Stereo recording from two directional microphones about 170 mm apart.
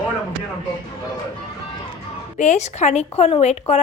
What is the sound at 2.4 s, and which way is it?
A woman's voice, 45° left (ahead or behind).